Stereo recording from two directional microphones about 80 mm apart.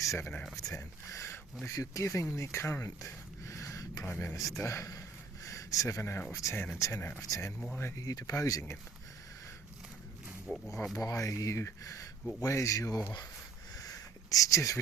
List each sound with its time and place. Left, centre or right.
0.0 s speech: left
2.8 s a sound: left
4.0 s speech: left
4.4 s speech: left
7.2 s speech: left
10.5 s speech: centre
10.9 s speech: left
13.7 s a sound: left